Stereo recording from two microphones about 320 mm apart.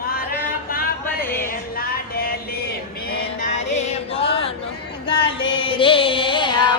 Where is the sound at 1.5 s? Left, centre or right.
Left.